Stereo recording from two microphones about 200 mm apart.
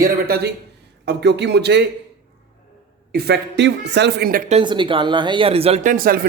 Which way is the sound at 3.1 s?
55° right (ahead or behind).